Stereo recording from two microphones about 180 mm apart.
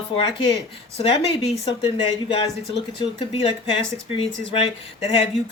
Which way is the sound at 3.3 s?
30° left (ahead or behind).